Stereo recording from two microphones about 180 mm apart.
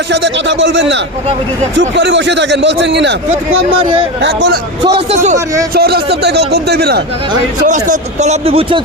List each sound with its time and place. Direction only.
0.1 s a man's voice: 75° right (ahead or behind)
4.2 s a man's voice: 70° right (ahead or behind)
5.1 s speech: 40° right (ahead or behind)
5.7 s speech: 60° right (ahead or behind)
7.7 s speech: 40° right (ahead or behind)